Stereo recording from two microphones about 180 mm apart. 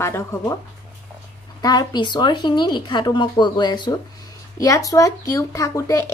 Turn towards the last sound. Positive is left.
turn(degrees=20)  # may be behind; listen again after turning